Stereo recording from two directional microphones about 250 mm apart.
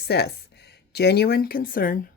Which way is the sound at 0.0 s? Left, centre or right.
Left.